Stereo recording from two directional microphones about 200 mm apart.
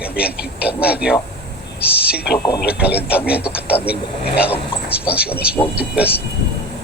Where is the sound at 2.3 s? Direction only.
20° left (ahead or behind).